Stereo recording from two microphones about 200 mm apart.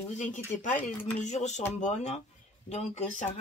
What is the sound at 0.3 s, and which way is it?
Speech, 40° left (ahead or behind).